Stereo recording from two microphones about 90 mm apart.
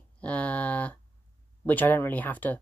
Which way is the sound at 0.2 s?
15° left (ahead or behind).